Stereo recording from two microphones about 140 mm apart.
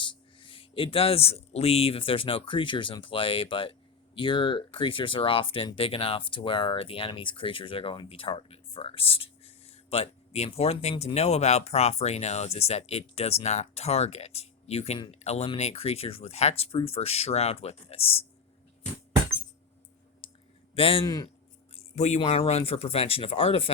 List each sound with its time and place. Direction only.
0.0 s speech: 35° left (ahead or behind)
20.7 s speech: 40° left (ahead or behind)
21.0 s a man's voice: 30° left (ahead or behind)
21.8 s speech: 50° left (ahead or behind)